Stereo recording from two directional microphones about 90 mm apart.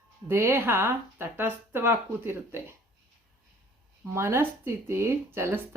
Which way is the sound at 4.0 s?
30° right (ahead or behind).